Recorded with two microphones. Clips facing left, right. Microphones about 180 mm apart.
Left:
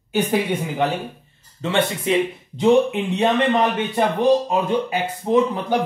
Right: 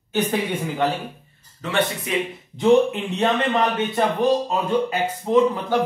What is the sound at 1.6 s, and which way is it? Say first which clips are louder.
Speech: left 2 dB; 25° left (ahead or behind).